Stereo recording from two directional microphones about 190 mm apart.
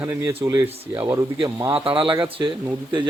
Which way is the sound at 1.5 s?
15° right (ahead or behind).